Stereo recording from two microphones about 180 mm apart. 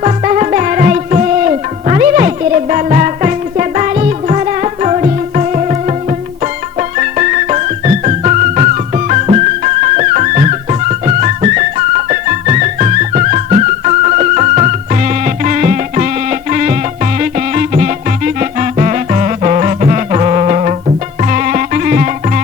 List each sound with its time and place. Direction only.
0.0 s music: 40° right (ahead or behind)
6.9 s music: 45° right (ahead or behind)